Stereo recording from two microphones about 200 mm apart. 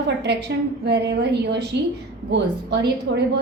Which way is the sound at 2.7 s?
55° right (ahead or behind).